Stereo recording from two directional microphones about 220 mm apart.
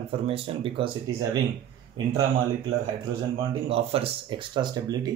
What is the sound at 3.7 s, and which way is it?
Speech, 25° right (ahead or behind).